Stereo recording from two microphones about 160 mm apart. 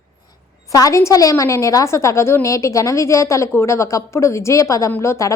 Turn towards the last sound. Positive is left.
turn(degrees=20)  # may be behind; listen again after turning